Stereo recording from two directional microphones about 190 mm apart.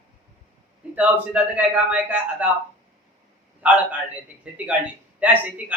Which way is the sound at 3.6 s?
10° right (ahead or behind).